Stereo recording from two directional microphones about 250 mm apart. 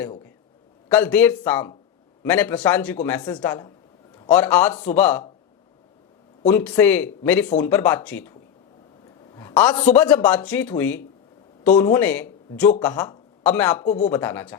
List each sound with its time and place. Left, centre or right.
0.9 s speech: centre
3.2 s a man's voice: centre
6.4 s speech: centre
9.3 s a sound: centre
9.9 s speech: centre
13.8 s speech: left
14.1 s speech: centre